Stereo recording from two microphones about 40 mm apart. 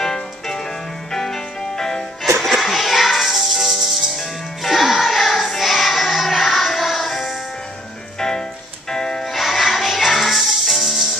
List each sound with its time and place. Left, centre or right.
0.0 s music: centre
2.4 s music: centre
8.2 s music: centre
9.2 s music: centre